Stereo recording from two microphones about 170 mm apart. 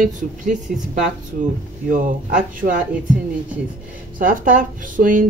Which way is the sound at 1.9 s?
50° right (ahead or behind).